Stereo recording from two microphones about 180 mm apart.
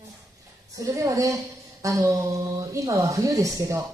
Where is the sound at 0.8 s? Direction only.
20° right (ahead or behind).